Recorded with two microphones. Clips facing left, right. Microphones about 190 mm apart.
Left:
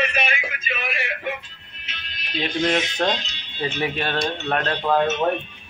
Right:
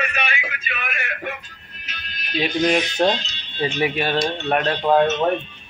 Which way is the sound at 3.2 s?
10° left (ahead or behind).